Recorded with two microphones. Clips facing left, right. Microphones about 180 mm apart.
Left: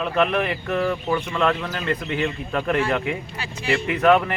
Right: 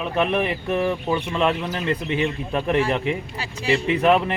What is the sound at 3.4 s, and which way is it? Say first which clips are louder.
Speech: right 2 dB; 35° right (ahead or behind).